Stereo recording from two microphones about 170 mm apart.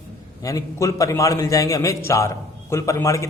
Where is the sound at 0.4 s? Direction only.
20° left (ahead or behind).